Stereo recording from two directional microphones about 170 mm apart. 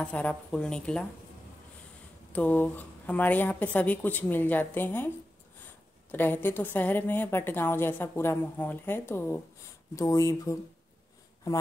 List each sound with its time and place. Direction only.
0.0 s a woman's voice: 10° left (ahead or behind)
2.3 s a woman's voice: 10° left (ahead or behind)
6.1 s a woman's voice: 10° left (ahead or behind)